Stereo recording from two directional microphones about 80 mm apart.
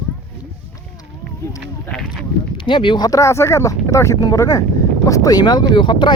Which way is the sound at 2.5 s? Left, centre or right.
Left.